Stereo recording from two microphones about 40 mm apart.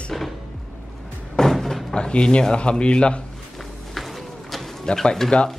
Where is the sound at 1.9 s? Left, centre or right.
Left.